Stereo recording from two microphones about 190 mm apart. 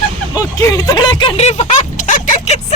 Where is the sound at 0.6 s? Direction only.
20° left (ahead or behind); by 2.5 s 40° left (ahead or behind).